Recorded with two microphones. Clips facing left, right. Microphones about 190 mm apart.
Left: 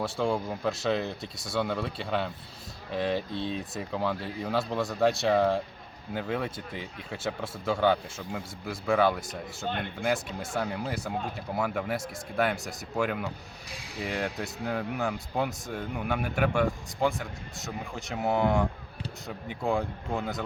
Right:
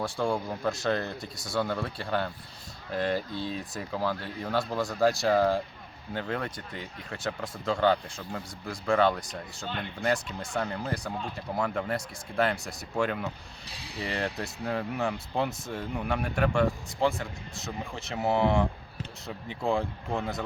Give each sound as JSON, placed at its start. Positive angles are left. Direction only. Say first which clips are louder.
{"t": 0.0, "sound": "speech", "louder": "left 1 dB", "side_deg": 0}
{"t": 9.6, "sound": "speech", "louder": "left 4 dB", "side_deg": 50}
{"t": 10.0, "sound": "speech", "louder": "right 2 dB", "side_deg": 5}